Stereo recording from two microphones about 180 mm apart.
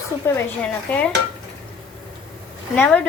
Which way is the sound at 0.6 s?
5° left (ahead or behind).